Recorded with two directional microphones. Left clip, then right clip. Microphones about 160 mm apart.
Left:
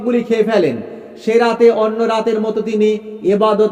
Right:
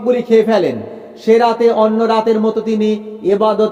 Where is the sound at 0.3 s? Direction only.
20° left (ahead or behind).